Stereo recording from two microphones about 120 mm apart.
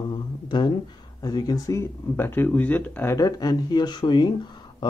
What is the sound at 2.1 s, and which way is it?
Speech, 15° left (ahead or behind).